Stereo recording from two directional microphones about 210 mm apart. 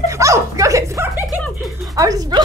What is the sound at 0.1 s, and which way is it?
Dog, 15° right (ahead or behind).